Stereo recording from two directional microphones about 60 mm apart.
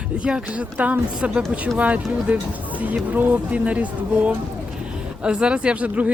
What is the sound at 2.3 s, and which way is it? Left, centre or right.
Speech, right.